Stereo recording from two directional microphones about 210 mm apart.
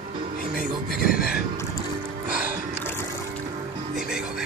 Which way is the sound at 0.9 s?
45° left (ahead or behind).